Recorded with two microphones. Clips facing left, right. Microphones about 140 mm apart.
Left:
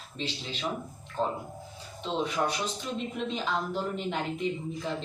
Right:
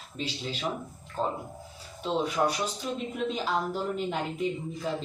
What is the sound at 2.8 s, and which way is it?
Speech, 5° right (ahead or behind).